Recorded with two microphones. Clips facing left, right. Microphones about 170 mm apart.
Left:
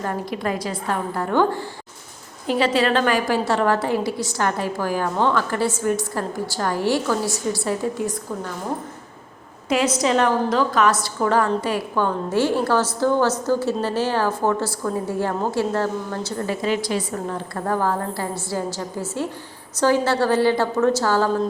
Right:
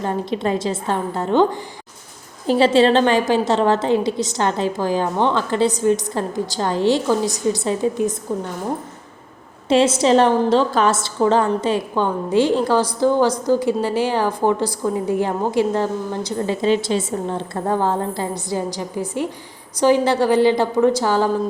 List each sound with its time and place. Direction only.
0.0 s a woman's voice: 25° right (ahead or behind)
9.6 s a woman's voice: 30° right (ahead or behind)